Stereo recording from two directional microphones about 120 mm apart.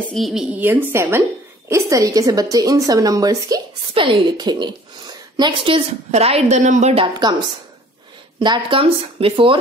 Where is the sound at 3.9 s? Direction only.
45° right (ahead or behind).